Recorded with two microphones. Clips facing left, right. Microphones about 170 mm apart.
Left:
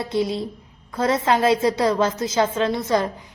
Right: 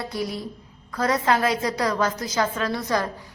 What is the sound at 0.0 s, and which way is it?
A woman's voice, 25° left (ahead or behind).